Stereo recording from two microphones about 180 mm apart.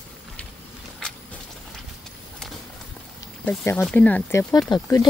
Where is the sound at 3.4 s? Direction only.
10° left (ahead or behind).